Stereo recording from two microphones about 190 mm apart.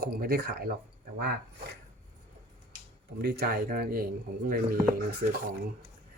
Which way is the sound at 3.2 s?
55° right (ahead or behind).